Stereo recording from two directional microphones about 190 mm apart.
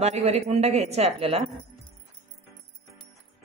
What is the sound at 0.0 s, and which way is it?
A woman's voice, 35° right (ahead or behind).